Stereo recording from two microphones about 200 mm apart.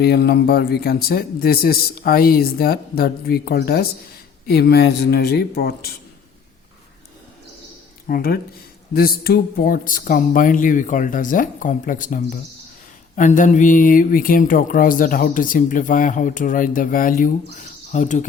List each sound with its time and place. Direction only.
0.0 s speech: 55° left (ahead or behind)
8.0 s speech: 45° left (ahead or behind)